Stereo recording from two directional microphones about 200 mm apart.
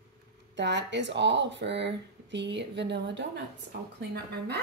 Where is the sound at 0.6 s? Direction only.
60° right (ahead or behind).